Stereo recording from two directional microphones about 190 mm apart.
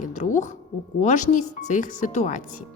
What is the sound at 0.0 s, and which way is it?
A woman's voice, 40° left (ahead or behind).